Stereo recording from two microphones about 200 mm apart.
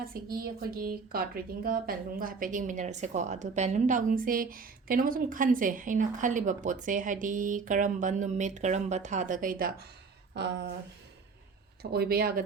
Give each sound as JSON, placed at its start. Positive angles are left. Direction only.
{"t": 0.0, "sound": "speech", "side_deg": -45}
{"t": 10.3, "sound": "speech", "side_deg": -60}
{"t": 11.8, "sound": "speech", "side_deg": -50}